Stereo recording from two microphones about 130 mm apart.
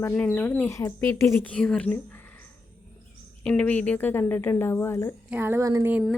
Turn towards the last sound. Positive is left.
turn(degrees=-20)  # may be behind; listen again after turning